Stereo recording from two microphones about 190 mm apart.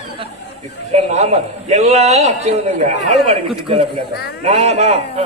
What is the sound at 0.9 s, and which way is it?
A man's voice, 35° right (ahead or behind).